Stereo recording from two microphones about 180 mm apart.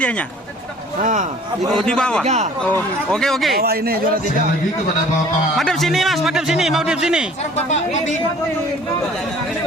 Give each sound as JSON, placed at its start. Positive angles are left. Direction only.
{"t": 0.0, "sound": "speech", "side_deg": 5}
{"t": 1.0, "sound": "speech", "side_deg": -45}
{"t": 1.7, "sound": "a man's voice", "side_deg": 5}
{"t": 2.2, "sound": "speech", "side_deg": -40}
{"t": 2.6, "sound": "a man's voice", "side_deg": 5}
{"t": 3.6, "sound": "speech", "side_deg": -60}
{"t": 5.5, "sound": "a man's voice", "side_deg": 0}
{"t": 7.7, "sound": "speech", "side_deg": 40}